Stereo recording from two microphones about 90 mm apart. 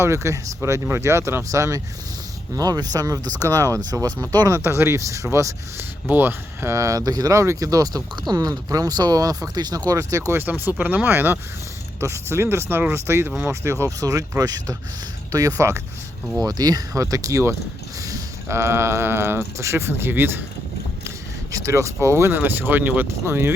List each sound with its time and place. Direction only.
0.0 s speech: 35° right (ahead or behind)
4.5 s speech: 25° right (ahead or behind)
10.3 s speech: 20° right (ahead or behind)
16.4 s speech: 45° right (ahead or behind); by 20.4 s 25° right (ahead or behind)
21.5 s speech: 35° right (ahead or behind)